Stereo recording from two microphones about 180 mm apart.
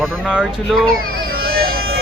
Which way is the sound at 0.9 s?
55° right (ahead or behind).